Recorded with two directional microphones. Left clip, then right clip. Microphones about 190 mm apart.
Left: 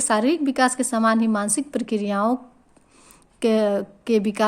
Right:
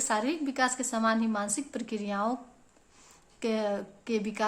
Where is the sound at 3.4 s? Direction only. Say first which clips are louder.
Left 10 dB; 40° left (ahead or behind).